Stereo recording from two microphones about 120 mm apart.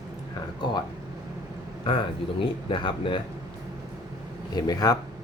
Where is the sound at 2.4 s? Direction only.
45° left (ahead or behind).